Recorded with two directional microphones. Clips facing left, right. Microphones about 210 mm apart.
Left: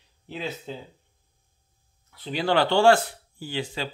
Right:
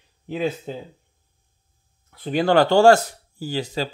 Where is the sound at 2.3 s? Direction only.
50° right (ahead or behind).